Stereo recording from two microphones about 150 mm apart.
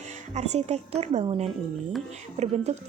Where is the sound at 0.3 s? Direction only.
50° right (ahead or behind).